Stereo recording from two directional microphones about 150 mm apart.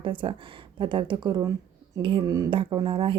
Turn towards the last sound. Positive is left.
turn(degrees=-35)  # may be behind; listen again after turning